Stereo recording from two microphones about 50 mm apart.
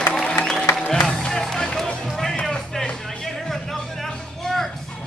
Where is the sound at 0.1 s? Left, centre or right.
Centre.